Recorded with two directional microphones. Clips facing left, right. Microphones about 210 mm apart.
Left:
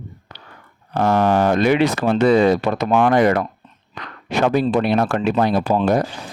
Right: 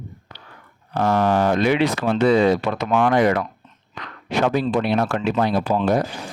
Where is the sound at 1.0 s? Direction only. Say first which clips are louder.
Left 2 dB; 50° left (ahead or behind).